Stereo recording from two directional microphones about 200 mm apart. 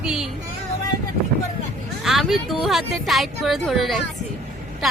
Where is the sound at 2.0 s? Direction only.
Centre (ahead or behind).